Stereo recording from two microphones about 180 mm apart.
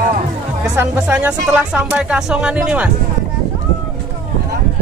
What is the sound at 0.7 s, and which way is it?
Speech, 5° right (ahead or behind).